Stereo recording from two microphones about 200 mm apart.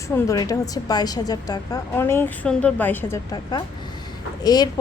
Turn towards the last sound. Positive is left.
turn(degrees=20)  # may be behind; listen again after turning